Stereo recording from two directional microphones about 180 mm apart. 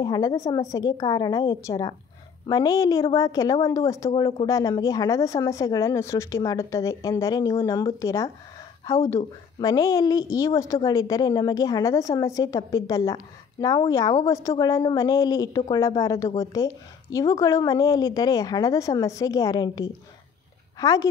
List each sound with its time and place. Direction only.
0.0 s a woman's voice: 20° left (ahead or behind)